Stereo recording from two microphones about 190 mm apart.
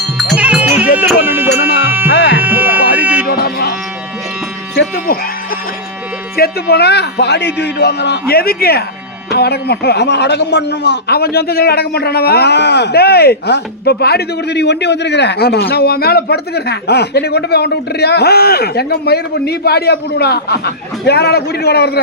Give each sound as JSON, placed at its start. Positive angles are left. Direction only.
{"t": 0.2, "sound": "sheep", "side_deg": -5}
{"t": 0.9, "sound": "music", "side_deg": -10}
{"t": 2.1, "sound": "music", "side_deg": 60}
{"t": 2.4, "sound": "music", "side_deg": -10}
{"t": 3.2, "sound": "a sound", "side_deg": 55}
{"t": 4.7, "sound": "music", "side_deg": 65}
{"t": 6.3, "sound": "speech", "side_deg": 55}